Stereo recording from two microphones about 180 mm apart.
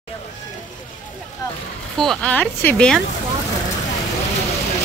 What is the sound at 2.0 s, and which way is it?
Speech, 5° left (ahead or behind).